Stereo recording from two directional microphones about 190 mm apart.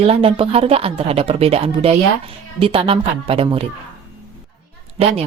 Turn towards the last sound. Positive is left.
turn(degrees=-30)  # may be behind; listen again after turning